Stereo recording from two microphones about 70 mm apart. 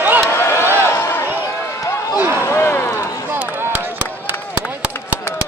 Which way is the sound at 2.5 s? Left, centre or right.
Left.